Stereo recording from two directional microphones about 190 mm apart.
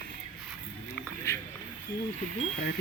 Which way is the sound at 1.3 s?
15° left (ahead or behind).